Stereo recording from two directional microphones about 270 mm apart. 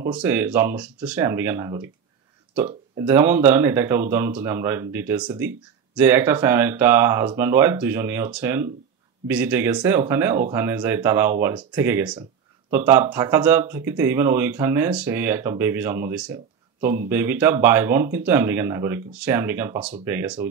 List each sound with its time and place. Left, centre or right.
0.0 s speech: centre